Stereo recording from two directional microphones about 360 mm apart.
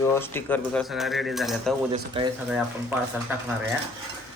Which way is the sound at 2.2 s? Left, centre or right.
Centre.